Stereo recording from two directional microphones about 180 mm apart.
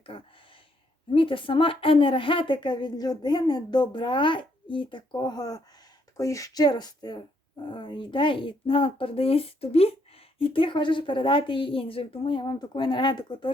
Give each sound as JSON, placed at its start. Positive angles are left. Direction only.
{"t": 0.1, "sound": "speech", "side_deg": 30}